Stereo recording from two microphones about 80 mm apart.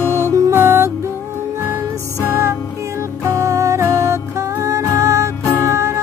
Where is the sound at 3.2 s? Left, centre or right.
Right.